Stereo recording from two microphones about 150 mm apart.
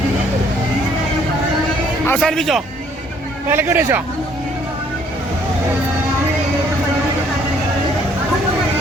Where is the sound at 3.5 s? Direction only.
15° right (ahead or behind).